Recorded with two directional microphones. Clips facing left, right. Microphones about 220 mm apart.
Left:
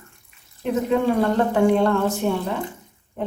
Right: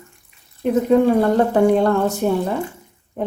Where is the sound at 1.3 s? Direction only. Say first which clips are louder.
Right 3 dB; 40° right (ahead or behind).